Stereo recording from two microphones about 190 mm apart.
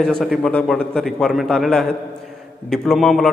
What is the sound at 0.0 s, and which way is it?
A man's voice, centre (ahead or behind).